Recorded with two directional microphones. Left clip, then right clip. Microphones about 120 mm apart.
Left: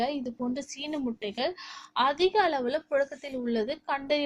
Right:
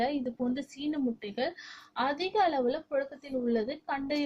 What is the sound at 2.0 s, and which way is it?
A woman's voice, 35° left (ahead or behind).